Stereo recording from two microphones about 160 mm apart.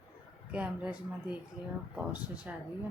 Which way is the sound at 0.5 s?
10° right (ahead or behind).